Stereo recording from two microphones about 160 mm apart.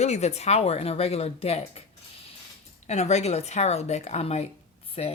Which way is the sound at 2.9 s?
45° left (ahead or behind).